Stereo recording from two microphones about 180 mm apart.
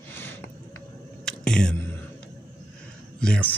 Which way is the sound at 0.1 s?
10° left (ahead or behind).